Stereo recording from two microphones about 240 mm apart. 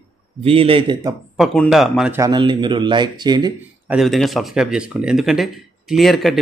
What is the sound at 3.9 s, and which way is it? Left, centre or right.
Speech, centre.